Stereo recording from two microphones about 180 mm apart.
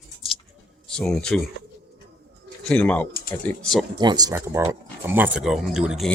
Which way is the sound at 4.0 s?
25° right (ahead or behind).